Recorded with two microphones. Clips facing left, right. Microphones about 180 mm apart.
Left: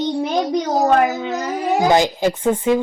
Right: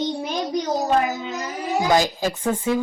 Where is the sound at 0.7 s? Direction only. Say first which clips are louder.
Left 6 dB; 90° left.